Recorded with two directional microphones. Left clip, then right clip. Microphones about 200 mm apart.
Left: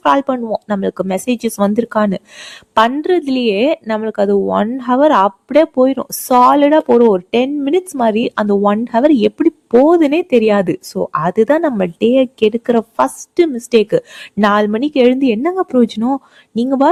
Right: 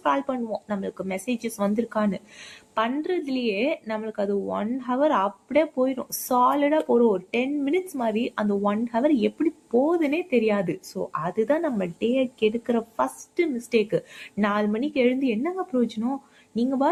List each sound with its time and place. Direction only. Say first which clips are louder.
0.0 s speech: left 11 dB; 55° left (ahead or behind)